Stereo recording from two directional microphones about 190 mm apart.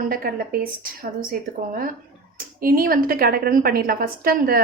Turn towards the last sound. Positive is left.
turn(degrees=-50)  # may be behind; listen again after turning